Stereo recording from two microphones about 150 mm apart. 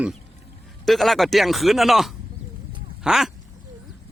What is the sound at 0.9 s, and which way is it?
Speech, centre (ahead or behind).